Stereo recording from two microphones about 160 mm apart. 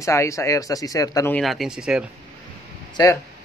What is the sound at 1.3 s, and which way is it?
Speech, centre (ahead or behind).